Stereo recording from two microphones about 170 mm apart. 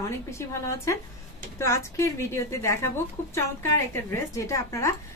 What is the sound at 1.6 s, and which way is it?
A woman's voice, 15° left (ahead or behind).